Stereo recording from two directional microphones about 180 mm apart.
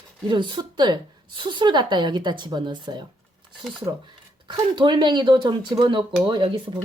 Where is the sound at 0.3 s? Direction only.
25° right (ahead or behind).